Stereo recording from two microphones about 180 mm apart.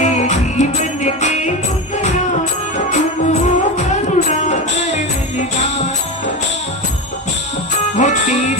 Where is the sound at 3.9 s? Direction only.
40° left (ahead or behind).